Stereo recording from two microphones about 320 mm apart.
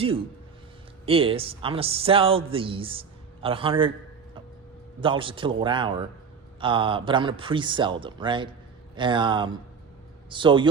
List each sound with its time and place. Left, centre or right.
1.0 s a man's voice: centre
4.9 s a man's voice: centre